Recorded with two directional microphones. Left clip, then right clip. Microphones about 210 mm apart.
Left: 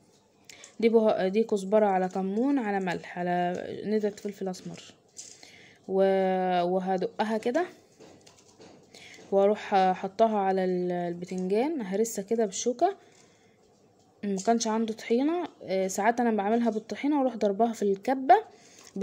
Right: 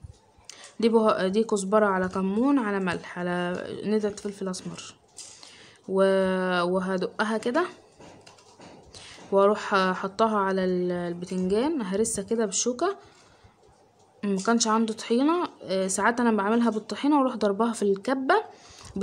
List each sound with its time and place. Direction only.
0.5 s speech: 10° left (ahead or behind)
2.2 s speech: centre (ahead or behind)
9.0 s speech: 10° left (ahead or behind)
14.4 s speech: 10° left (ahead or behind)